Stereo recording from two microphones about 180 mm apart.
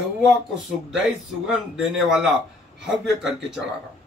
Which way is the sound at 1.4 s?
Centre (ahead or behind).